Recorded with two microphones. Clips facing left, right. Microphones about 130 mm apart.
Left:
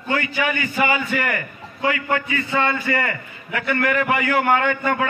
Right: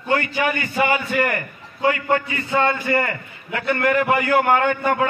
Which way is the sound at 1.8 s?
30° right (ahead or behind).